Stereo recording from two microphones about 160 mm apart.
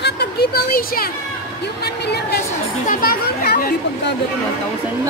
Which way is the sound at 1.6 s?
90° left.